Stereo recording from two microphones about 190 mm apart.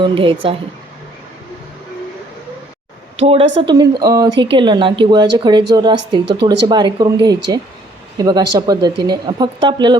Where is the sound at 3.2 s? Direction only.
30° right (ahead or behind).